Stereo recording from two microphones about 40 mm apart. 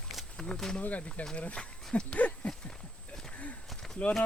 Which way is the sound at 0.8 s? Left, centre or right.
Left.